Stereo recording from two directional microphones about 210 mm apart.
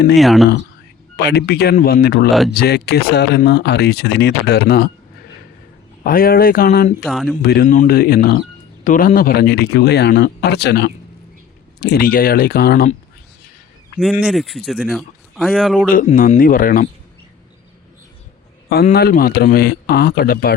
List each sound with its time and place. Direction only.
0.2 s speech: centre (ahead or behind)
1.1 s speech: 50° left (ahead or behind)
6.0 s speech: 45° left (ahead or behind)
7.0 s speech: centre (ahead or behind)
7.4 s speech: 45° left (ahead or behind)
14.0 s speech: centre (ahead or behind)
15.9 s speech: 40° left (ahead or behind)
18.9 s speech: 45° left (ahead or behind)